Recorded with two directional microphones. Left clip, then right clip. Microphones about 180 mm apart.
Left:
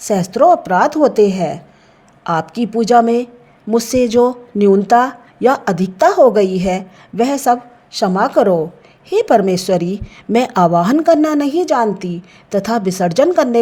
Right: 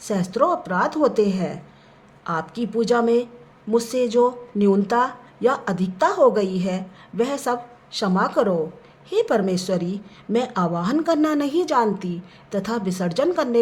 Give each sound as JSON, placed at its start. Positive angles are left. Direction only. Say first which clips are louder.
{"t": 0.0, "sound": "speech", "louder": "left 9 dB", "side_deg": 35}